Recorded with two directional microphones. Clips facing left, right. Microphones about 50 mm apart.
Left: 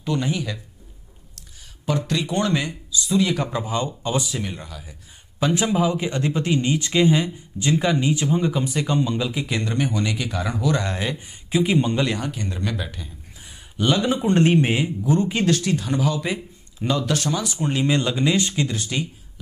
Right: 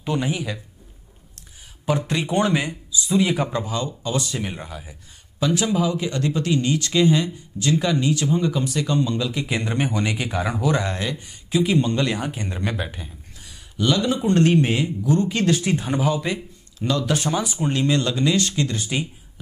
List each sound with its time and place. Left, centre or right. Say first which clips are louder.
0.0 s speech: even; centre
1.9 s speech: right 1 dB; centre
3.6 s speech: left 2 dB; left
4.4 s speech: right 1 dB; centre
5.4 s speech: left 1 dB; left; by 9.5 s centre
9.5 s speech: even; centre
11.0 s speech: left 1 dB; centre
12.2 s speech: even; right
13.4 s speech: even; left
15.6 s speech: right 1 dB; right
17.7 s speech: even; centre
18.9 s speech: right 1 dB; centre